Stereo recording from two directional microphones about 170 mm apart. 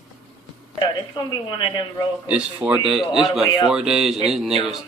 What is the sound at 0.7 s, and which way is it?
Speech, 25° left (ahead or behind).